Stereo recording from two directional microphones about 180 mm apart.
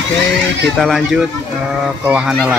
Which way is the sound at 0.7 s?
Centre (ahead or behind).